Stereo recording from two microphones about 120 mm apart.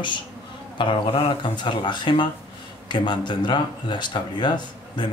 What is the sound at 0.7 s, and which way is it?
Speech, 45° left (ahead or behind).